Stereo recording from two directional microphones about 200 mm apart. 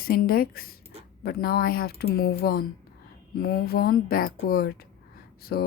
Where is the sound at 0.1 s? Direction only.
50° left (ahead or behind).